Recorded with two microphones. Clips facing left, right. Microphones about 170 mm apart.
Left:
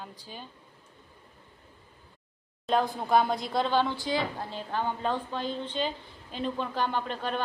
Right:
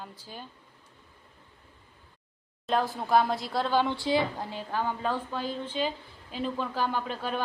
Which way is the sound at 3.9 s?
25° right (ahead or behind).